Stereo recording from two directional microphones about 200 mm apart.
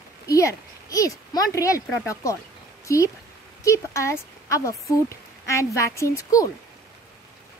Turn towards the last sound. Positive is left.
turn(degrees=15)  # may be behind; listen again after turning